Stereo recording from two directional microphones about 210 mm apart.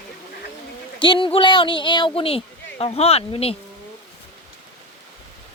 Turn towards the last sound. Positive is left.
turn(degrees=30)  # may be behind; listen again after turning